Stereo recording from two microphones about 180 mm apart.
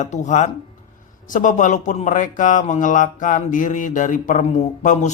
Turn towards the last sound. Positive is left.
turn(degrees=40)  # may be behind; listen again after turning